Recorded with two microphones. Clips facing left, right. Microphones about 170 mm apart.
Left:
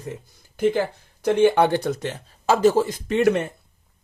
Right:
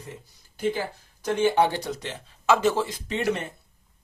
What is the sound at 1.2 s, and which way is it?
Speech, 60° left (ahead or behind).